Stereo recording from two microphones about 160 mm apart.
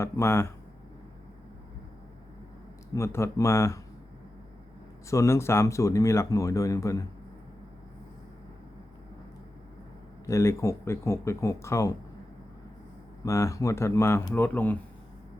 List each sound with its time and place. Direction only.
0.0 s speech: 15° left (ahead or behind)
2.9 s speech: 15° left (ahead or behind)
5.1 s speech: 20° left (ahead or behind)
10.2 s speech: 20° left (ahead or behind)
13.2 s speech: 20° left (ahead or behind)